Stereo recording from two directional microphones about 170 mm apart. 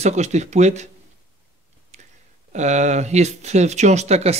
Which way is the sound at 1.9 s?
40° right (ahead or behind).